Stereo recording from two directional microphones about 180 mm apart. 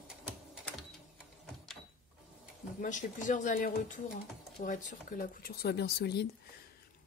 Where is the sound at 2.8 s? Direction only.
45° left (ahead or behind); by 6.2 s 65° left (ahead or behind).